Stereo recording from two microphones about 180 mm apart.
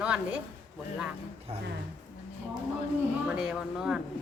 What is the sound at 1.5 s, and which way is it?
Speech, 35° right (ahead or behind).